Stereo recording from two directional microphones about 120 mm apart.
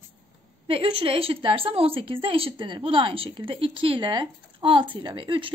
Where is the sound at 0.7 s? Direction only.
50° right (ahead or behind).